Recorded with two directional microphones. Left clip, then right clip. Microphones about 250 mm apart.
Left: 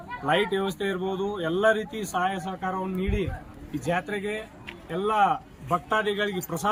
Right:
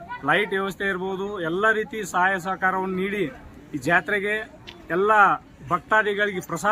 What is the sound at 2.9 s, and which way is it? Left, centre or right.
Speech, right.